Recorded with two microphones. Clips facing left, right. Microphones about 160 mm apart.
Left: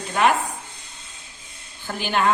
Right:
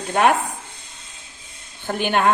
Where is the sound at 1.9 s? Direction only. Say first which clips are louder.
Right 3 dB; 55° right (ahead or behind).